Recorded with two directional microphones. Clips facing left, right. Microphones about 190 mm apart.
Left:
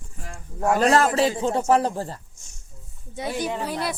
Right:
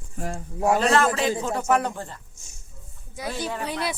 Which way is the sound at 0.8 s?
40° left (ahead or behind).